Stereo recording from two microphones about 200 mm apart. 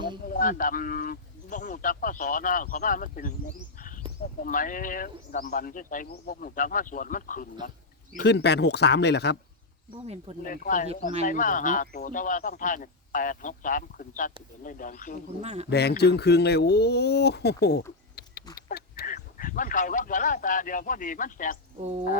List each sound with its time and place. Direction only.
0.3 s speech: 45° left (ahead or behind)
3.8 s a sound: 40° left (ahead or behind)
4.2 s speech: 45° left (ahead or behind)
8.1 s speech: 55° left (ahead or behind)
9.9 s speech: 30° right (ahead or behind)
10.4 s speech: 45° left (ahead or behind)
15.4 s speech: 30° right (ahead or behind)
15.7 s speech: 55° left (ahead or behind)